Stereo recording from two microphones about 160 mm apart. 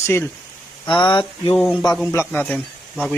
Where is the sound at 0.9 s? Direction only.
30° left (ahead or behind).